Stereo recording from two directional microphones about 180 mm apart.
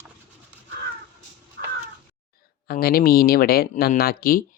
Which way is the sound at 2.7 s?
55° left (ahead or behind).